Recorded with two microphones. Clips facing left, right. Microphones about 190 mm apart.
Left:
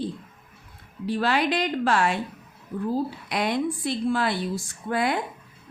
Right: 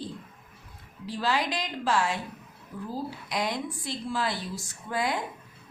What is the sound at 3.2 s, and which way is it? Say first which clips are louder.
A woman's voice: left 4 dB; 60° left (ahead or behind).